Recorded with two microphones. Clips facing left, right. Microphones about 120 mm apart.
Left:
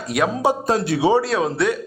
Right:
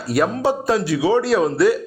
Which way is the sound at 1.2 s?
Centre (ahead or behind).